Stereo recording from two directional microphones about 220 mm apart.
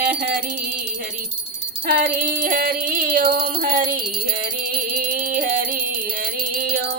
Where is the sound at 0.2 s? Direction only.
40° right (ahead or behind).